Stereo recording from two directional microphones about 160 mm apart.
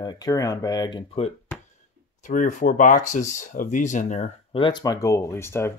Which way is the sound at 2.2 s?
50° left (ahead or behind).